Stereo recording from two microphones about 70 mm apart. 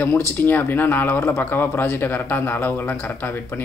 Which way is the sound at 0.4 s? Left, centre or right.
Left.